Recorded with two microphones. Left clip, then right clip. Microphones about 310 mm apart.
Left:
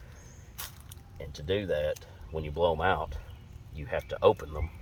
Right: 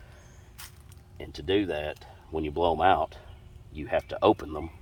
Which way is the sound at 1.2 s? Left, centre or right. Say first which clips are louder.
Right 5 dB; centre.